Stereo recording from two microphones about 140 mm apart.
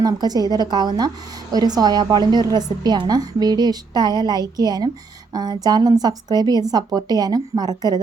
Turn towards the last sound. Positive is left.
turn(degrees=-30)  # may be behind; listen again after turning